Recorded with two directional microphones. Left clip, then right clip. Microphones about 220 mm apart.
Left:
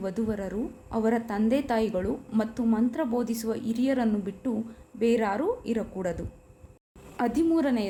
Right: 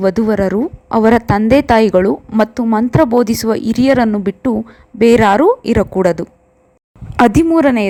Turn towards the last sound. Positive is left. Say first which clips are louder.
# right 14 dB
turn(degrees=-35)  # may be behind; listen again after turning